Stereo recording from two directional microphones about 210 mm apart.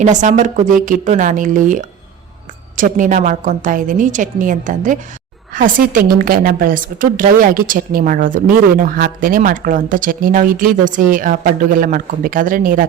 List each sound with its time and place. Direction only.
0.0 s speech: 35° right (ahead or behind)